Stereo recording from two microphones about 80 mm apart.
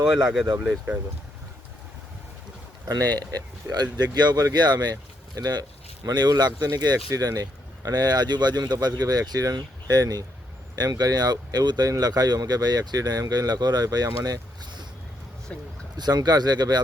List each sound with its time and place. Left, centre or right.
0.0 s speech: centre
2.8 s speech: right
16.0 s speech: right